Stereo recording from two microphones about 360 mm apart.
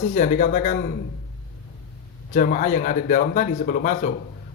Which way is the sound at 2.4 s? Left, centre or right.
Left.